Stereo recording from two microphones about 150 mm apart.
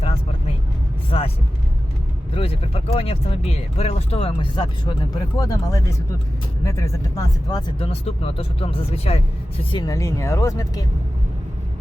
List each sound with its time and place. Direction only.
1.1 s speech: 40° left (ahead or behind)
2.3 s speech: 40° left (ahead or behind); by 7.6 s 20° left (ahead or behind)
7.8 s speech: 40° left (ahead or behind)
9.7 s speech: 25° left (ahead or behind)